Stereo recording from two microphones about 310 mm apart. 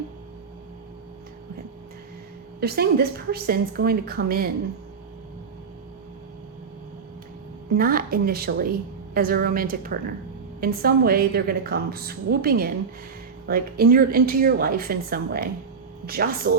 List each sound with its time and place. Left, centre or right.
2.6 s a woman's voice: right
7.7 s a woman's voice: right